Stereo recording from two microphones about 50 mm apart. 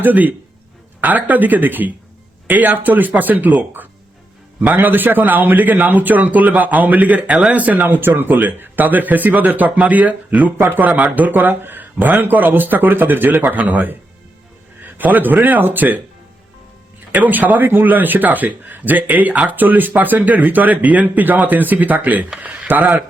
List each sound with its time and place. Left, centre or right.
0.0 s speech: right
14.8 s a sound: right
15.4 s speech: right
17.2 s speech: right